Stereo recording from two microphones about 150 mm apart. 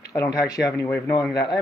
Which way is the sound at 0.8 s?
15° left (ahead or behind).